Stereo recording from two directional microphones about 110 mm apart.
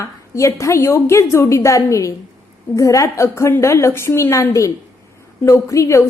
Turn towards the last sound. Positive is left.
turn(degrees=25)  # may be behind; listen again after turning